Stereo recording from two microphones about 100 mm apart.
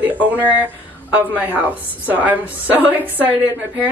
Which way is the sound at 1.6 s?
15° right (ahead or behind).